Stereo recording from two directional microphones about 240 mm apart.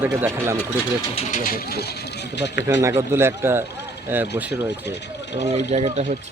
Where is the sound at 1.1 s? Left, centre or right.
Left.